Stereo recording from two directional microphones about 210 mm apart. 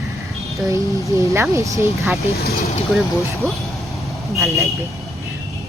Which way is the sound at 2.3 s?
50° left (ahead or behind).